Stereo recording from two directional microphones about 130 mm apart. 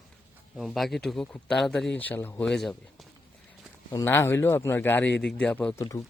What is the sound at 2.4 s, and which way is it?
Speech, 5° left (ahead or behind).